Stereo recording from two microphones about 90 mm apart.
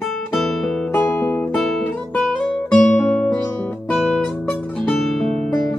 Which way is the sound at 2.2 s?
Centre (ahead or behind).